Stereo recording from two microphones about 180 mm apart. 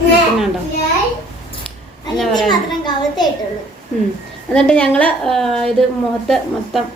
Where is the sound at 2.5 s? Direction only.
25° left (ahead or behind).